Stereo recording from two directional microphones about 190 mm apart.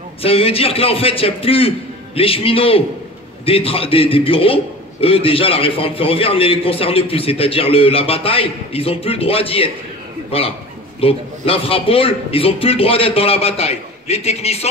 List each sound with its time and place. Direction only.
0.2 s a man's voice: 30° left (ahead or behind)
11.0 s a man's voice: 30° left (ahead or behind)